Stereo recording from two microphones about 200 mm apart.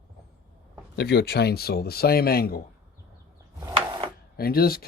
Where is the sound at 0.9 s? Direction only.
55° left (ahead or behind).